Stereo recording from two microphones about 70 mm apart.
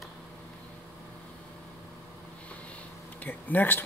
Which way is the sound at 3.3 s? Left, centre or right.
Left.